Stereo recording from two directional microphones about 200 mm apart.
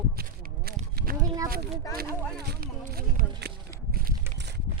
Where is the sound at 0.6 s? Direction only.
50° right (ahead or behind).